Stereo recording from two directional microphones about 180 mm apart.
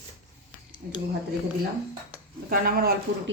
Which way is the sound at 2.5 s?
55° right (ahead or behind).